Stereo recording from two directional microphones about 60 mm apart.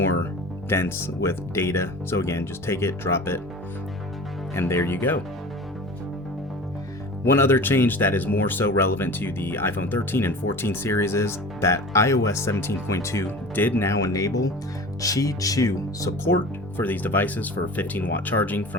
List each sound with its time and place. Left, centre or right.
0.7 s speech: left
4.5 s speech: left
7.3 s speech: left
13.6 s speech: left
13.8 s speech: left
16.7 s speech: left